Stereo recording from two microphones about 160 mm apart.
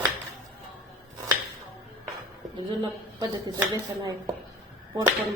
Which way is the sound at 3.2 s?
25° right (ahead or behind).